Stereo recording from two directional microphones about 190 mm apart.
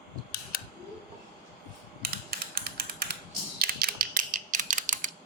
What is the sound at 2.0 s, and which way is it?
Mechanisms, 50° right (ahead or behind).